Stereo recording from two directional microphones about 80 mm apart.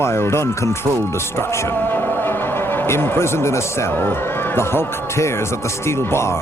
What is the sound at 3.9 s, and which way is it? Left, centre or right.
Speech, left.